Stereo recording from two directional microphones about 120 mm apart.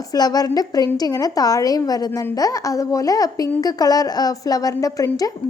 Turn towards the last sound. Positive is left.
turn(degrees=30)  # may be behind; listen again after turning